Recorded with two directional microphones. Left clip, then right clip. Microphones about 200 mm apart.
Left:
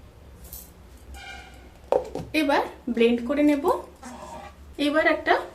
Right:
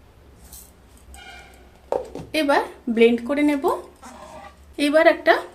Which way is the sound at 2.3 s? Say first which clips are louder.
Right 3 dB; 50° right (ahead or behind).